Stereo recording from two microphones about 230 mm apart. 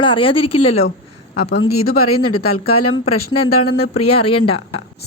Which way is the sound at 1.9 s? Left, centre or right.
Left.